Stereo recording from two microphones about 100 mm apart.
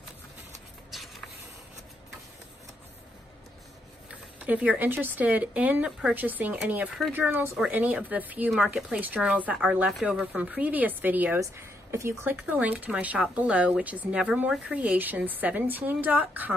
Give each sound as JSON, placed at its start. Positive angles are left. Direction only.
{"t": 4.4, "sound": "speech", "side_deg": -15}
{"t": 11.3, "sound": "speech", "side_deg": -30}